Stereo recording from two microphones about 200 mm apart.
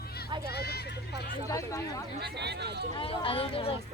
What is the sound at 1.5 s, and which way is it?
Chatter, 15° left (ahead or behind).